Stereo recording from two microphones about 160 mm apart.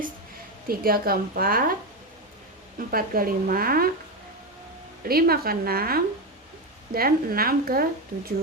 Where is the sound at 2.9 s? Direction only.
65° right (ahead or behind).